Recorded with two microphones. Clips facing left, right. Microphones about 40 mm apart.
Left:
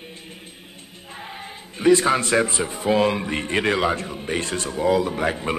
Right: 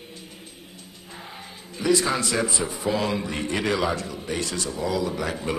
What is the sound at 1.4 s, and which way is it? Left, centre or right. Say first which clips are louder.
A man's voice: left 8 dB; left.